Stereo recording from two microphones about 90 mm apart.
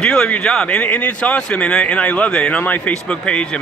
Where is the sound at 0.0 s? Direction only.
10° left (ahead or behind).